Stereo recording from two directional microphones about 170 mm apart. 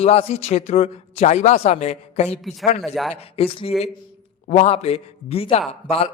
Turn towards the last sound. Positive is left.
turn(degrees=35)  # may be behind; listen again after turning